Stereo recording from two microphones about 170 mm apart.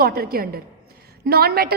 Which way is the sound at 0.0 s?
65° right (ahead or behind).